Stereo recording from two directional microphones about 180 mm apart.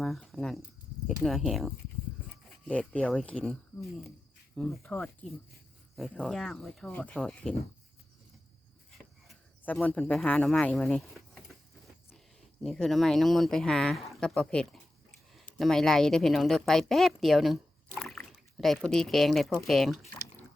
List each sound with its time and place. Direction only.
0.0 s a sound: centre (ahead or behind)
1.2 s speech: centre (ahead or behind)
9.2 s speech: centre (ahead or behind)
12.6 s a woman's voice: centre (ahead or behind)